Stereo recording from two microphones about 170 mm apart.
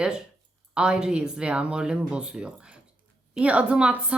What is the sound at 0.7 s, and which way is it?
A woman's voice, 5° right (ahead or behind).